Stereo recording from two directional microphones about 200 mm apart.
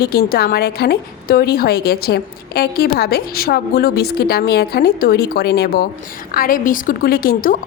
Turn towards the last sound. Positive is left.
turn(degrees=45)  # may be behind; listen again after turning